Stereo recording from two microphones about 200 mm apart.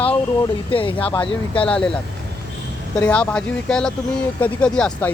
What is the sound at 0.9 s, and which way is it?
Speech, 10° left (ahead or behind).